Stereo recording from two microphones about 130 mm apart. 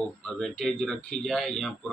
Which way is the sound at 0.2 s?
Centre (ahead or behind).